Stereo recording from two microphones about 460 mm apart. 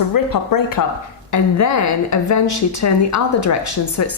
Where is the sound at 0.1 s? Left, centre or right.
Left.